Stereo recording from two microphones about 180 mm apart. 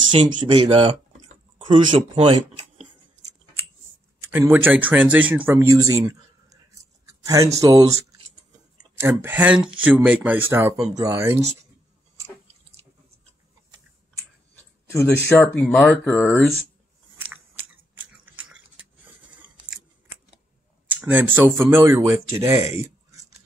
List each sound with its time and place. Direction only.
0.1 s speech: 30° right (ahead or behind)
4.3 s speech: 10° right (ahead or behind)
9.0 s speech: 10° right (ahead or behind)
14.9 s speech: 15° left (ahead or behind)
18.1 s a sound: 5° right (ahead or behind)
20.9 s speech: 10° right (ahead or behind)